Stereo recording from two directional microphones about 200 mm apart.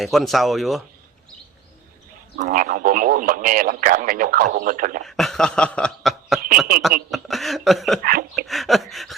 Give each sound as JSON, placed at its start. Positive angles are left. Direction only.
{"t": 0.0, "sound": "cough", "side_deg": 0}
{"t": 2.4, "sound": "speech", "side_deg": -40}
{"t": 5.0, "sound": "speech", "side_deg": 0}
{"t": 7.1, "sound": "cough", "side_deg": 0}
{"t": 8.0, "sound": "speech", "side_deg": -45}
{"t": 8.4, "sound": "cough", "side_deg": 0}